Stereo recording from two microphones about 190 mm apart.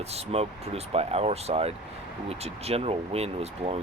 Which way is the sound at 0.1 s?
35° right (ahead or behind).